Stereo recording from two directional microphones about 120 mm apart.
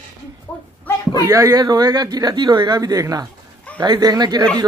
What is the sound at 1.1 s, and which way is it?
Speech, 30° right (ahead or behind).